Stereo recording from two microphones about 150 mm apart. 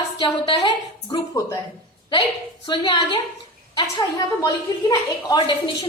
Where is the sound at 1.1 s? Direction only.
20° left (ahead or behind).